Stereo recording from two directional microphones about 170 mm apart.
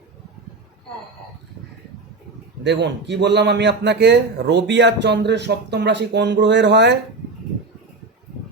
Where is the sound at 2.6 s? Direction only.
90° right.